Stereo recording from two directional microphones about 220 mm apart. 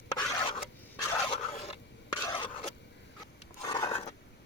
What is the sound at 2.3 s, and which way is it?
Stir, 20° left (ahead or behind).